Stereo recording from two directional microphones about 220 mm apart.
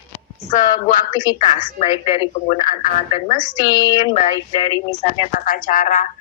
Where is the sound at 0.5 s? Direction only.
35° left (ahead or behind).